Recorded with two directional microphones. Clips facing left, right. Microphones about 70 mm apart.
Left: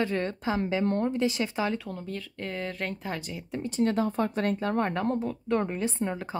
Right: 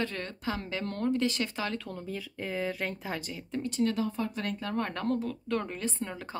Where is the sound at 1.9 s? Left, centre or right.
Centre.